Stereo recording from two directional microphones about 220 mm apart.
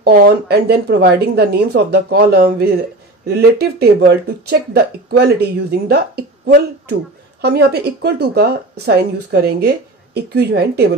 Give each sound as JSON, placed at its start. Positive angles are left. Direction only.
{"t": 0.0, "sound": "speech", "side_deg": -45}
{"t": 7.4, "sound": "speech", "side_deg": -45}